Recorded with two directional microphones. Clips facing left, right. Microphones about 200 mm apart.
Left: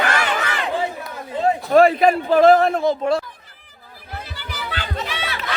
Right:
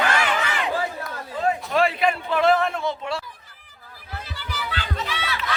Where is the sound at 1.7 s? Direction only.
45° left (ahead or behind).